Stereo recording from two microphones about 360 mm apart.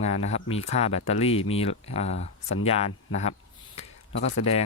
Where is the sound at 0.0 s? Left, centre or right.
Centre.